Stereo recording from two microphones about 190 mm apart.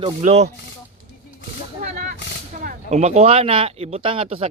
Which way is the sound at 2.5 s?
45° right (ahead or behind).